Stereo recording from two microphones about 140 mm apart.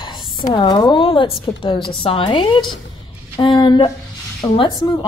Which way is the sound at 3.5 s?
25° left (ahead or behind).